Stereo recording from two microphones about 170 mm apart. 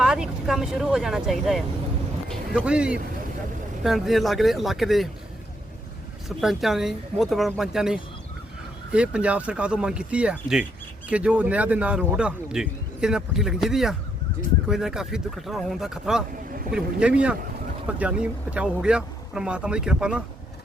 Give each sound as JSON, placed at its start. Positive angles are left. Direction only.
{"t": 0.0, "sound": "a man's voice", "side_deg": -5}
{"t": 6.2, "sound": "a man's voice", "side_deg": 0}